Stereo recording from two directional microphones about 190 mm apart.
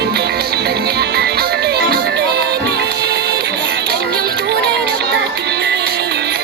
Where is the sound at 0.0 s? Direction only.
60° right (ahead or behind).